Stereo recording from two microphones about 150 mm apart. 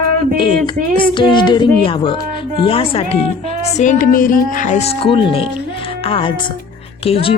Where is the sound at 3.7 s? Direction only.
55° left (ahead or behind); by 7.3 s 40° left (ahead or behind).